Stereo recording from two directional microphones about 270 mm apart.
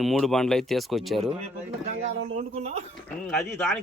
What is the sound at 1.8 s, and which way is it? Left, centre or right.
Speech, right.